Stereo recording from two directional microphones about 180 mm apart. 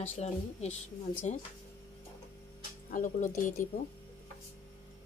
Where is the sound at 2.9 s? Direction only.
45° left (ahead or behind).